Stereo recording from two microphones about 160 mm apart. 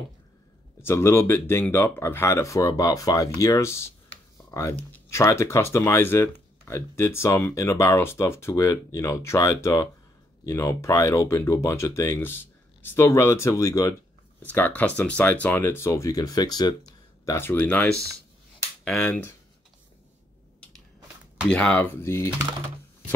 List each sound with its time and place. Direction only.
0.8 s speech: 15° left (ahead or behind)
18.9 s speech: 10° left (ahead or behind)
21.5 s speech: 5° left (ahead or behind)